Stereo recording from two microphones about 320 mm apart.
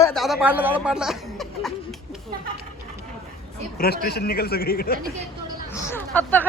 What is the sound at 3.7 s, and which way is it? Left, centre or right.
Speech, left.